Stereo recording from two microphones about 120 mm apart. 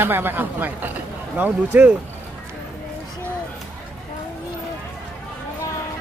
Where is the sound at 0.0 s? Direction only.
20° right (ahead or behind).